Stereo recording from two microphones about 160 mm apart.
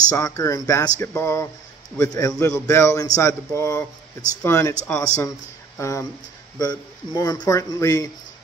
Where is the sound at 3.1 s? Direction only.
20° left (ahead or behind).